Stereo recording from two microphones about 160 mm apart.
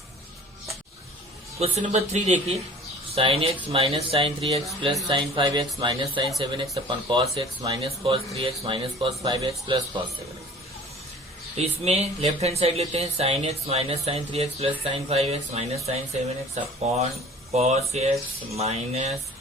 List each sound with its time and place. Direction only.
1.5 s speech: 45° right (ahead or behind)
3.2 s speech: 35° right (ahead or behind)
11.5 s speech: 40° right (ahead or behind)
17.5 s speech: 40° right (ahead or behind)